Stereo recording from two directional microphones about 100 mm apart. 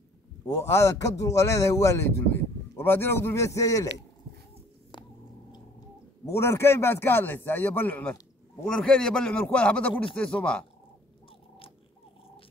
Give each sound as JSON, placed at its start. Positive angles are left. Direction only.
{"t": 0.5, "sound": "speech", "side_deg": 30}
{"t": 4.9, "sound": "chewing", "side_deg": 50}
{"t": 6.2, "sound": "speech", "side_deg": 30}